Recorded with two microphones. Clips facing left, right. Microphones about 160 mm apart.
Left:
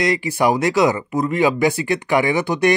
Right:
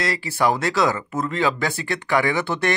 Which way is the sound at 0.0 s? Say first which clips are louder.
Left 4 dB; 15° left (ahead or behind).